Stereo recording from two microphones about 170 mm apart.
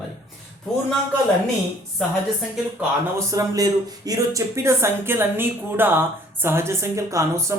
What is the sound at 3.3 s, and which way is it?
Speech, 20° right (ahead or behind).